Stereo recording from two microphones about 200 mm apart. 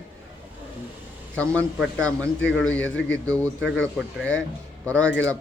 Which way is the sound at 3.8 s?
5° left (ahead or behind).